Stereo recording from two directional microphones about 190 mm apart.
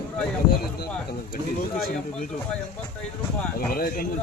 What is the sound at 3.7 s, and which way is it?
Speech, 50° left (ahead or behind).